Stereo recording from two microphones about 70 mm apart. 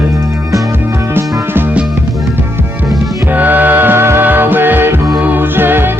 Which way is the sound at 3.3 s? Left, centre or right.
Right.